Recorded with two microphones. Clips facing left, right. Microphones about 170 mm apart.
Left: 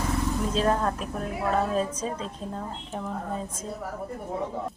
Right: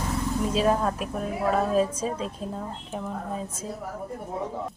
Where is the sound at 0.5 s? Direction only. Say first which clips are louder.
Right 2 dB; 10° right (ahead or behind).